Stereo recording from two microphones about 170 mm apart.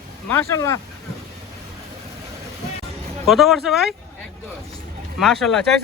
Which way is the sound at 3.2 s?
Centre (ahead or behind).